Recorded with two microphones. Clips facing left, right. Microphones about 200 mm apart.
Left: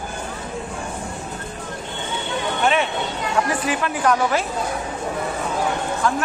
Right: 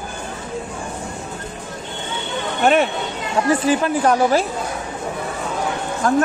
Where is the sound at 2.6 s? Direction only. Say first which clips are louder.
Right 5 dB; 45° right (ahead or behind).